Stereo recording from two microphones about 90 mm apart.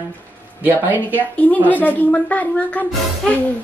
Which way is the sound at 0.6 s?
20° right (ahead or behind).